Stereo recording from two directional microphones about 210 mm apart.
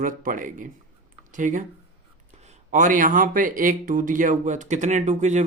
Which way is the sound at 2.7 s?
40° right (ahead or behind).